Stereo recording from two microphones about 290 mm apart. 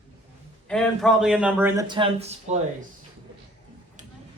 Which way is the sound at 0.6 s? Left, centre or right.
Centre.